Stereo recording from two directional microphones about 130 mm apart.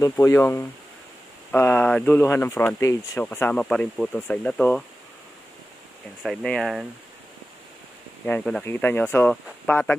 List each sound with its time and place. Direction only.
0.1 s speech: 20° left (ahead or behind)
6.2 s speech: 5° left (ahead or behind)
8.3 s speech: 5° left (ahead or behind)